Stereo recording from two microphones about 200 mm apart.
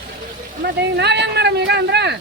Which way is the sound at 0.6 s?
55° right (ahead or behind).